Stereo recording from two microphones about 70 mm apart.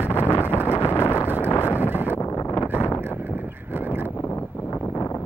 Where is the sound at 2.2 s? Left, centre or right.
Left.